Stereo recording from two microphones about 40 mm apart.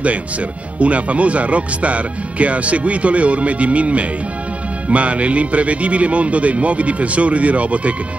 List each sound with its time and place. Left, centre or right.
0.7 s speech: right